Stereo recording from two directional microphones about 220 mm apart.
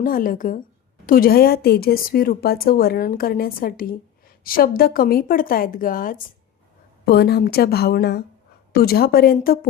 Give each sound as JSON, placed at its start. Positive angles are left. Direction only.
{"t": 0.0, "sound": "a woman's voice", "side_deg": 40}